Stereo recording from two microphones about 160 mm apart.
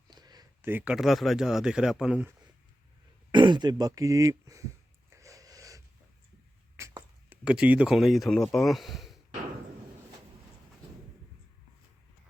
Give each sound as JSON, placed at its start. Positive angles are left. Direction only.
{"t": 0.1, "sound": "a sound", "side_deg": -25}
{"t": 0.6, "sound": "speech", "side_deg": -10}
{"t": 3.3, "sound": "speech", "side_deg": -30}
{"t": 5.1, "sound": "snort", "side_deg": -20}
{"t": 6.7, "sound": "a sound", "side_deg": -15}
{"t": 7.4, "sound": "speech", "side_deg": -5}